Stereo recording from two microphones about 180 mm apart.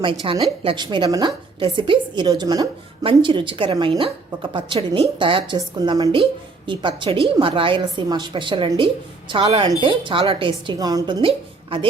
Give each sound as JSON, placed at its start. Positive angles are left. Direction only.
{"t": 0.0, "sound": "a woman's voice", "side_deg": -30}